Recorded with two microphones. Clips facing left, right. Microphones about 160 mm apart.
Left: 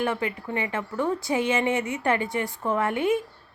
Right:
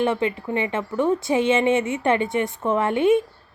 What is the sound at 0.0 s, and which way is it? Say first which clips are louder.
A woman's voice: right 5 dB; 25° right (ahead or behind).